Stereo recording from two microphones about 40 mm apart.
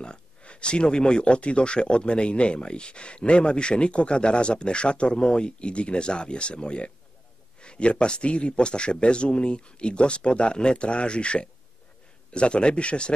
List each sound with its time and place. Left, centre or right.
0.0 s speech: left